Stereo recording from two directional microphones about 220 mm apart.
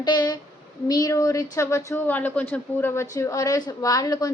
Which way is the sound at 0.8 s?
15° left (ahead or behind).